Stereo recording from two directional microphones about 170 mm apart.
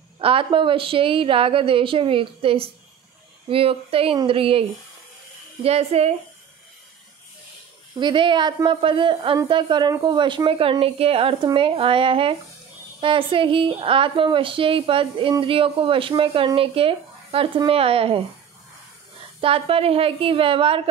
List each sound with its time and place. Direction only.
0.2 s speech: 30° right (ahead or behind)
8.0 s a woman's voice: 30° right (ahead or behind)
19.4 s speech: 35° right (ahead or behind)